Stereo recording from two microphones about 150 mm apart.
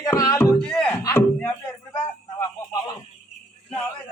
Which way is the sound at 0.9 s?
15° left (ahead or behind).